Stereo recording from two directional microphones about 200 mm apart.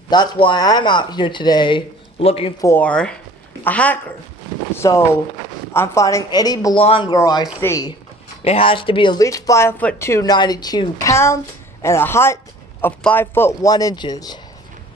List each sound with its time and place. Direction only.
0.1 s speech: 20° left (ahead or behind)
2.6 s speech: 10° left (ahead or behind)
8.5 s speech: 25° left (ahead or behind)